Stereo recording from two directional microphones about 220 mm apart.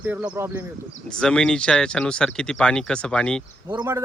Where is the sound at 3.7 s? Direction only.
15° right (ahead or behind).